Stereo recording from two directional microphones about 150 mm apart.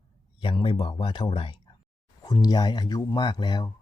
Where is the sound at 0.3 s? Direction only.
35° left (ahead or behind).